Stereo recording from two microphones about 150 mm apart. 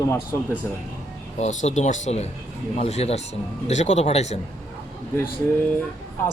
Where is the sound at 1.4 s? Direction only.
50° left (ahead or behind).